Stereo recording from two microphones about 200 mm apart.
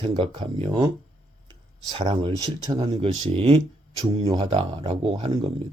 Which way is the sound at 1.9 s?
25° right (ahead or behind).